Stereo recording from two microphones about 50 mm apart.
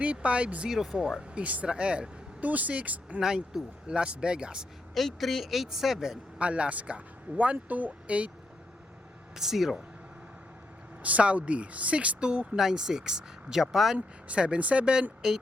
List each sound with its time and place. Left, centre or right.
0.0 s speech: right
0.7 s speech: centre
1.3 s speech: right
2.4 s speech: right
3.2 s speech: centre
4.9 s speech: centre
6.4 s speech: right
9.3 s speech: centre
11.0 s speech: right
12.5 s speech: centre
14.3 s speech: right
15.2 s speech: centre